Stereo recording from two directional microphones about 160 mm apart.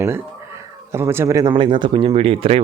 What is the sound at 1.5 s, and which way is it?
Speech, 30° right (ahead or behind).